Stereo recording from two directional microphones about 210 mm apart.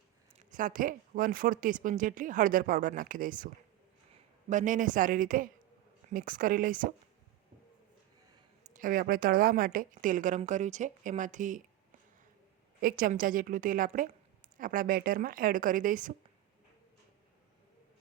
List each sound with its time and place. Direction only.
0.3 s a woman's voice: 40° right (ahead or behind)
8.7 s a woman's voice: 40° right (ahead or behind)
12.8 s a woman's voice: 40° right (ahead or behind)